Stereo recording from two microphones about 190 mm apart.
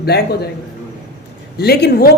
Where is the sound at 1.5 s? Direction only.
55° left (ahead or behind).